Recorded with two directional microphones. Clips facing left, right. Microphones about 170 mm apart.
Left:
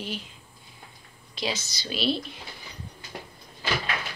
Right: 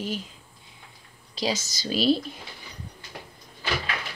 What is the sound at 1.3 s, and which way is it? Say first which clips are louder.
Speech: right 3 dB; 40° right (ahead or behind).